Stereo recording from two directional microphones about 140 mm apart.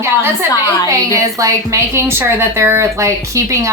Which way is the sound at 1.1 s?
20° right (ahead or behind).